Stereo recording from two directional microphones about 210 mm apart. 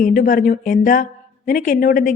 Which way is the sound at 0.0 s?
40° left (ahead or behind).